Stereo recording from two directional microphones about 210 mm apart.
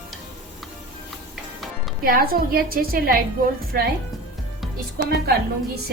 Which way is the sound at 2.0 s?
45° right (ahead or behind).